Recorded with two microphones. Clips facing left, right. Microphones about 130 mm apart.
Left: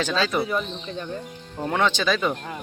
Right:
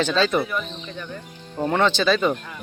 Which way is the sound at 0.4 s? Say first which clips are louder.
Left 2 dB; 30° left (ahead or behind).